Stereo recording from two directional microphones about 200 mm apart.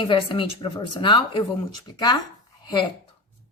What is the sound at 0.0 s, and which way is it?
Speech, 25° left (ahead or behind).